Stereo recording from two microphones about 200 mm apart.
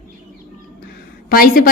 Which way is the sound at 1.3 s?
45° left (ahead or behind).